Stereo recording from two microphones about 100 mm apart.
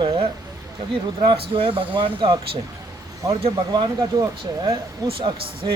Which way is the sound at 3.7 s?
50° right (ahead or behind).